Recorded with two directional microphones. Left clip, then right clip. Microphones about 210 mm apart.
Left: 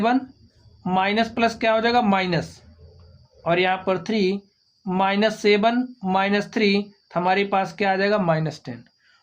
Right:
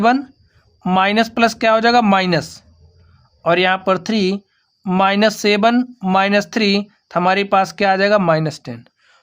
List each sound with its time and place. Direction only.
0.8 s speech: 50° right (ahead or behind)